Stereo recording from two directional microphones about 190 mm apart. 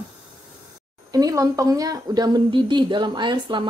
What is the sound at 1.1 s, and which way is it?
A woman's voice, 20° right (ahead or behind).